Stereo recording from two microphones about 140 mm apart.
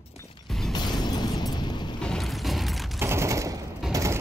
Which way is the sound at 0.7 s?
30° left (ahead or behind).